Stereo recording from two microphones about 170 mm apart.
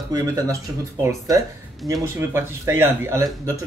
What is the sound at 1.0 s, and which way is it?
Speech, 20° right (ahead or behind).